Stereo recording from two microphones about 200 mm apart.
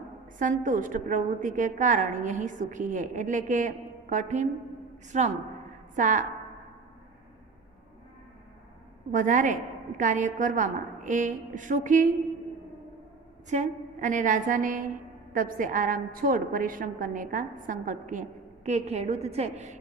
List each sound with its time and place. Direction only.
0.3 s a woman's voice: 40° right (ahead or behind)
9.1 s a woman's voice: 40° right (ahead or behind)
13.5 s a woman's voice: 40° right (ahead or behind)